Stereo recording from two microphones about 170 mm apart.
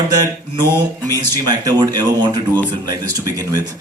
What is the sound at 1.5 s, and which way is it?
Speech, 25° right (ahead or behind).